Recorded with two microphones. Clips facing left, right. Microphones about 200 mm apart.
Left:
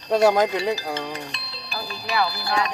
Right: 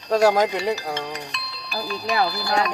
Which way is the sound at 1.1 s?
30° left (ahead or behind).